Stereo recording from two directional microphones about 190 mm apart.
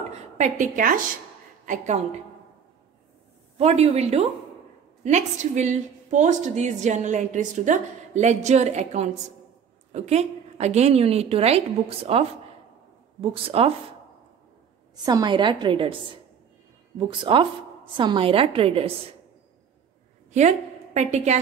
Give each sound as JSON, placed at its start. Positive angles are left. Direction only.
{"t": 0.1, "sound": "a woman's voice", "side_deg": -40}
{"t": 3.5, "sound": "a woman's voice", "side_deg": -35}
{"t": 15.0, "sound": "a woman's voice", "side_deg": -20}
{"t": 17.1, "sound": "a woman's voice", "side_deg": -25}
{"t": 20.2, "sound": "a woman's voice", "side_deg": -40}